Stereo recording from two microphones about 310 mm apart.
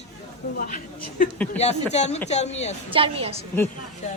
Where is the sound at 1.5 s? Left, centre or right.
Left.